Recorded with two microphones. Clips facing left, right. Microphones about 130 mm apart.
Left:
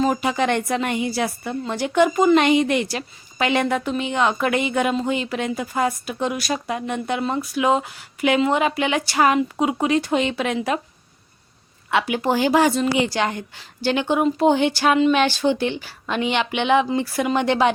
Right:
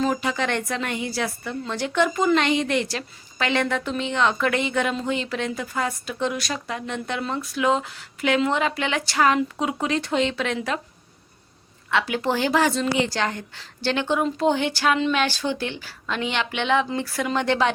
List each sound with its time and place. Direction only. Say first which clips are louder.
0.0 s a woman's voice: left 4 dB; 15° left (ahead or behind)
11.9 s a woman's voice: left 3 dB; 15° left (ahead or behind)